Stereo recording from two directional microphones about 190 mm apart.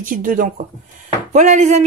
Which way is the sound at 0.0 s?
45° right (ahead or behind).